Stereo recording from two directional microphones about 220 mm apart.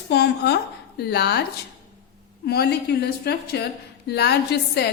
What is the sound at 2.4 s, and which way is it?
A woman's voice, 45° left (ahead or behind).